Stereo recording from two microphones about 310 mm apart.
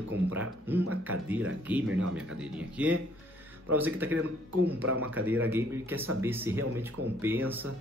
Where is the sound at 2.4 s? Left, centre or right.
Centre.